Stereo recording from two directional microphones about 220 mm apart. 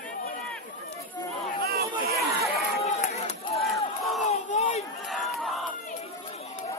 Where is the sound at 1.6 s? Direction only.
45° right (ahead or behind).